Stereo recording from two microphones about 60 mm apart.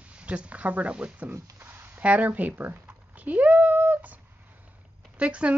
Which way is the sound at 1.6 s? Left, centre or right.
Right.